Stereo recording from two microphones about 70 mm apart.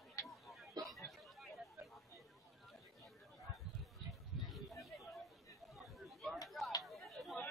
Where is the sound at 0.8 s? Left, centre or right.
Centre.